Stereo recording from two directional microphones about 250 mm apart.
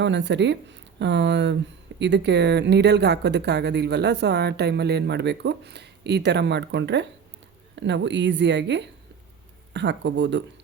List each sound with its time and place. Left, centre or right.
0.0 s speech: right